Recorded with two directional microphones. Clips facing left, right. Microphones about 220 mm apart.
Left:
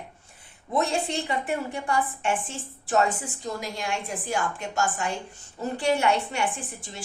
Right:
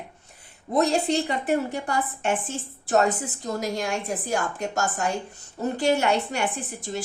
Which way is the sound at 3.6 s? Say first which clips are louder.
Right 4 dB; 40° right (ahead or behind).